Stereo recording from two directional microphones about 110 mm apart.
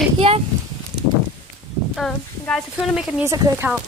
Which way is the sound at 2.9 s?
5° right (ahead or behind).